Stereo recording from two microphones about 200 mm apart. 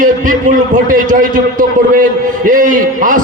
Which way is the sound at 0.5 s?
40° right (ahead or behind).